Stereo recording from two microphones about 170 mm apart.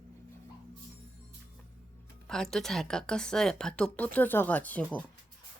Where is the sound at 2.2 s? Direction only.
5° left (ahead or behind).